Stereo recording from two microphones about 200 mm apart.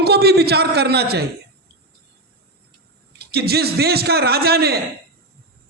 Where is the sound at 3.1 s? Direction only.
50° right (ahead or behind).